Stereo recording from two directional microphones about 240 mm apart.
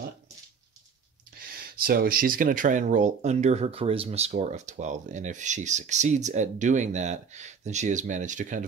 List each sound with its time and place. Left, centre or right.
1.4 s speech: right